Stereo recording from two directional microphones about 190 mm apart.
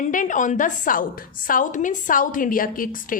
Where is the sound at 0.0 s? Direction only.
45° left (ahead or behind).